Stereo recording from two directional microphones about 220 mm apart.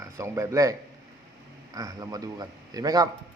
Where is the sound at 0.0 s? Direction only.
15° right (ahead or behind).